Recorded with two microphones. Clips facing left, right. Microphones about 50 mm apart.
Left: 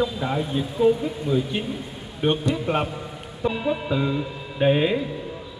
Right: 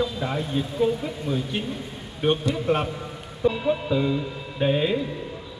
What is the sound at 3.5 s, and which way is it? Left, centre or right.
Speech, centre.